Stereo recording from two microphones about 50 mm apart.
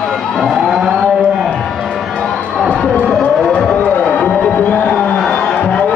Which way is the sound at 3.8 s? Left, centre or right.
Left.